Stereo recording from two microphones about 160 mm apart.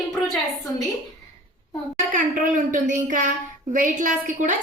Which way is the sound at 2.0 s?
50° right (ahead or behind).